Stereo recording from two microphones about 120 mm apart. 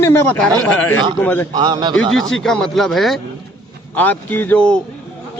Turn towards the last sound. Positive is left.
turn(degrees=15)  # may be behind; listen again after turning